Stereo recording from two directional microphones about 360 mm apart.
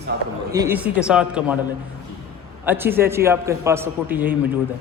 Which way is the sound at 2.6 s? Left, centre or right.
Centre.